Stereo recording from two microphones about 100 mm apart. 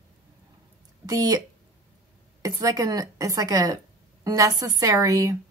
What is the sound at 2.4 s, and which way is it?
A woman's voice, 35° right (ahead or behind).